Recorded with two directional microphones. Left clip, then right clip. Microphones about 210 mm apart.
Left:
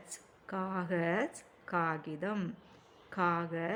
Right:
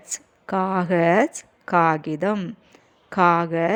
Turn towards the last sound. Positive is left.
turn(degrees=-35)  # may be behind; listen again after turning